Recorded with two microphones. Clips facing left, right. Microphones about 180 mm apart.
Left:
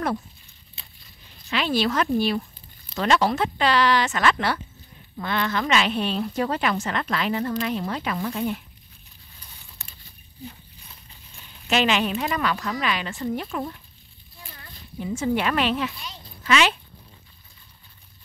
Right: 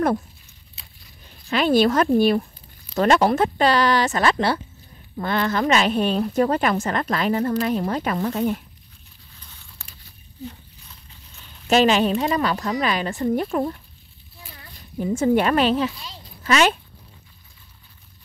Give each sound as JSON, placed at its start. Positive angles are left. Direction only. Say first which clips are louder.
{"t": 1.5, "sound": "a woman's voice", "louder": "right 6 dB", "side_deg": -45}
{"t": 11.7, "sound": "a woman's voice", "louder": "right 5 dB", "side_deg": -40}
{"t": 15.0, "sound": "speech", "louder": "right 6 dB", "side_deg": -45}